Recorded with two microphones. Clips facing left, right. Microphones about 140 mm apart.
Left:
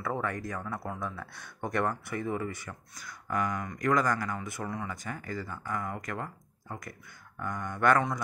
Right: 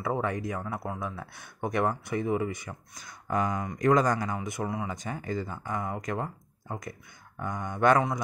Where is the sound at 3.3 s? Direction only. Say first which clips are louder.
Right 3 dB; 25° right (ahead or behind).